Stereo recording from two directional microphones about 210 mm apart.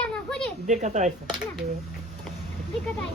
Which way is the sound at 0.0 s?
Centre (ahead or behind).